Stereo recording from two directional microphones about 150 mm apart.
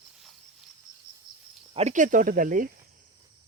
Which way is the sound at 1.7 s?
55° right (ahead or behind).